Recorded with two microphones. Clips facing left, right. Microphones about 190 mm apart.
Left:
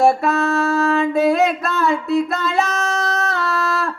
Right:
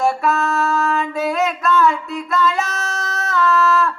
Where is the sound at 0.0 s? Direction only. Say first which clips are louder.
Left 3 dB; 40° left (ahead or behind).